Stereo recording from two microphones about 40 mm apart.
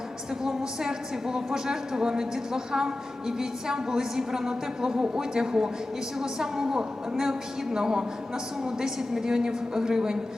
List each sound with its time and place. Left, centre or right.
0.4 s a woman's voice: centre